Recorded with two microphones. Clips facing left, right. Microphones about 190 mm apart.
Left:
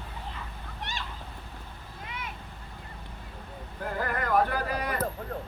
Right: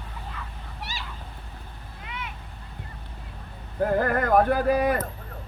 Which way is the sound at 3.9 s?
50° right (ahead or behind).